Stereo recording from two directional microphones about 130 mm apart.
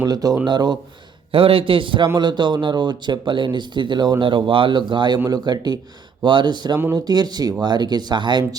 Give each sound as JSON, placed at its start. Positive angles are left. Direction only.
{"t": 0.0, "sound": "speech", "side_deg": -30}
{"t": 1.3, "sound": "a man's voice", "side_deg": -45}